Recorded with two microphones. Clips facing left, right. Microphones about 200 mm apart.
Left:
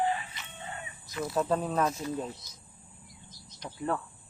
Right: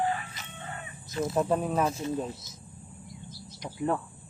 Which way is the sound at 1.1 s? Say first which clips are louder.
Right 3 dB; 25° right (ahead or behind).